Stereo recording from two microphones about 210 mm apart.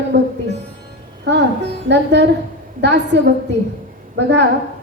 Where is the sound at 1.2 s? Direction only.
55° right (ahead or behind).